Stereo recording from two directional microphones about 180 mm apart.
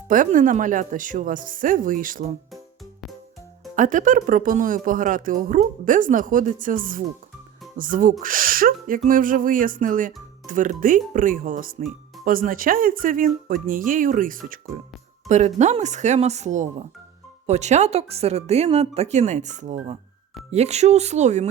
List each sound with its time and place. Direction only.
0.1 s speech: 45° right (ahead or behind)
3.8 s speech: 45° right (ahead or behind)